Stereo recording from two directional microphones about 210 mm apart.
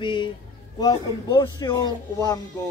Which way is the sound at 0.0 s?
20° left (ahead or behind).